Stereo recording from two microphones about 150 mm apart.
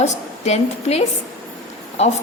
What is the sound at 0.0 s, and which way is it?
A woman's voice, 45° left (ahead or behind).